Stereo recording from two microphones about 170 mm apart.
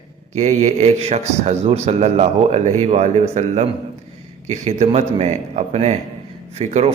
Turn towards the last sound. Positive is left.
turn(degrees=-35)  # may be behind; listen again after turning